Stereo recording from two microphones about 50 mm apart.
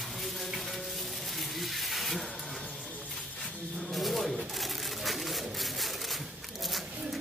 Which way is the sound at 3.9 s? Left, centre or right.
Centre.